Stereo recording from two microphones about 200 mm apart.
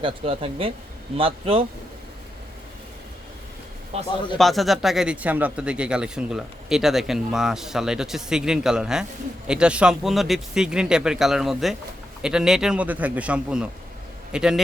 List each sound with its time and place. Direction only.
0.0 s speech: 30° right (ahead or behind)
3.9 s a man's voice: 30° right (ahead or behind)
4.4 s speech: centre (ahead or behind)